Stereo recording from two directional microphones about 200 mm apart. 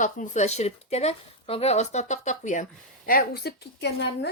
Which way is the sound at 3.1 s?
50° left (ahead or behind).